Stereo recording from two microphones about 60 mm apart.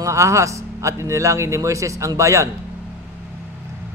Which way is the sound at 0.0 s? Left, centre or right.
Right.